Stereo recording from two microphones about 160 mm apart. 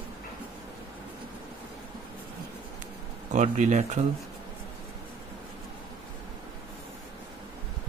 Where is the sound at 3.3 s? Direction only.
50° right (ahead or behind).